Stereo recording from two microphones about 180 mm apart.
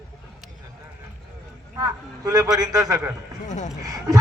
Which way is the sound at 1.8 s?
20° right (ahead or behind).